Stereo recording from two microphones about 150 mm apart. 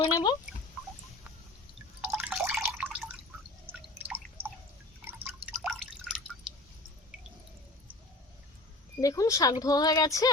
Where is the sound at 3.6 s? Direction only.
15° right (ahead or behind).